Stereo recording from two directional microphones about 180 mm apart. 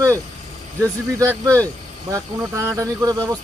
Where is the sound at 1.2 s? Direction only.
15° right (ahead or behind).